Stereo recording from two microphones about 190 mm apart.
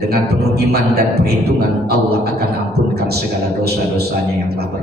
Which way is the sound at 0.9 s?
55° right (ahead or behind).